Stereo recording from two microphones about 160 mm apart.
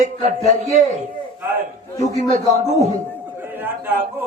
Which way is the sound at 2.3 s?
45° right (ahead or behind).